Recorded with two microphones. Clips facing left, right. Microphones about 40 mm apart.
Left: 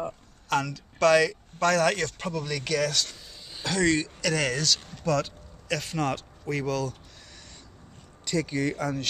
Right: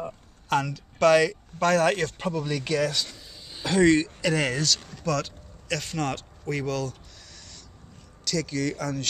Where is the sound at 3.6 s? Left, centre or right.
Right.